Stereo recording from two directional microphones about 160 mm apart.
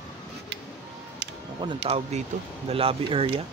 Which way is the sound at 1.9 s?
40° right (ahead or behind).